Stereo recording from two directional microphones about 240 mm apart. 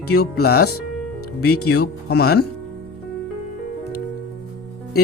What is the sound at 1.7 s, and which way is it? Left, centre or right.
Speech, left.